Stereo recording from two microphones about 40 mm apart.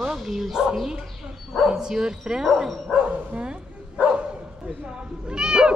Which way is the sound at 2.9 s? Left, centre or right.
Right.